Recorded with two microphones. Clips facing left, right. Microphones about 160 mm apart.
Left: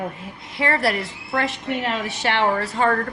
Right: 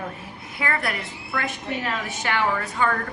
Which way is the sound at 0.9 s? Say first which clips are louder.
Left 7 dB; 30° left (ahead or behind).